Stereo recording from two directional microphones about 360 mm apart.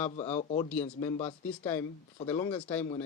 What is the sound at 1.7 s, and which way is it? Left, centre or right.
Speech, centre.